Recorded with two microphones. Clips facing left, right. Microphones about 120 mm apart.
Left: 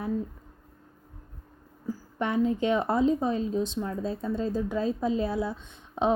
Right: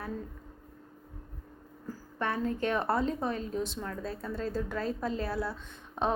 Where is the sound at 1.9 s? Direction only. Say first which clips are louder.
Left 4 dB; 15° left (ahead or behind).